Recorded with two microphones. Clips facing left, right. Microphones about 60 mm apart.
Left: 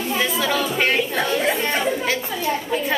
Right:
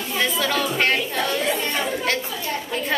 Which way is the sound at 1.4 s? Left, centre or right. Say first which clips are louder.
Left 3 dB; left.